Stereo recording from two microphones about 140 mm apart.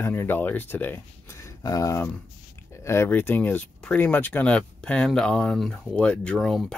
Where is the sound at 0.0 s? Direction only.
15° left (ahead or behind).